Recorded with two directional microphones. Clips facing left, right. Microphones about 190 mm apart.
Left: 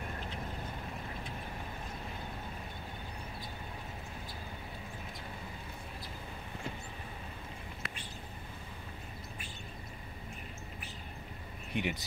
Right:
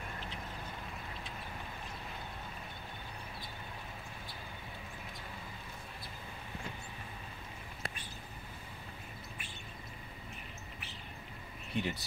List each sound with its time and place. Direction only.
11.7 s speech: 15° left (ahead or behind)